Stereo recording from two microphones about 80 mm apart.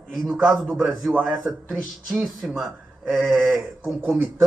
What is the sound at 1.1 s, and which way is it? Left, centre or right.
Speech, centre.